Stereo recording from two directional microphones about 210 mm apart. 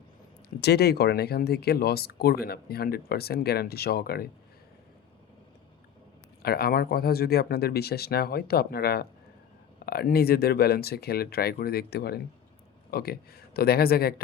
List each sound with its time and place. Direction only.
0.6 s speech: 50° left (ahead or behind)
6.4 s speech: 45° left (ahead or behind)